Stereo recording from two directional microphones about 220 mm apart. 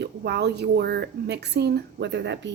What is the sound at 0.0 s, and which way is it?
A woman's voice, 50° right (ahead or behind).